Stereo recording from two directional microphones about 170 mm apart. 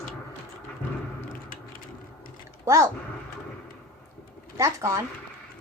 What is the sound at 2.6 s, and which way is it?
Speech, 20° right (ahead or behind).